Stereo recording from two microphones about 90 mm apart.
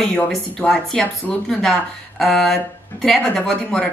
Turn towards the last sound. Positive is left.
turn(degrees=10)  # may be behind; listen again after turning